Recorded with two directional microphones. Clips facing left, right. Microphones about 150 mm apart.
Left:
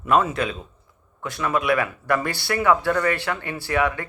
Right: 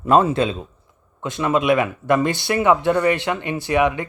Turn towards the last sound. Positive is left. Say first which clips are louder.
# right 4 dB
turn(degrees=-20)  # may be behind; listen again after turning